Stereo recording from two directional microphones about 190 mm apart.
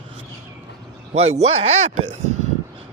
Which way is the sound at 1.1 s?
35° right (ahead or behind).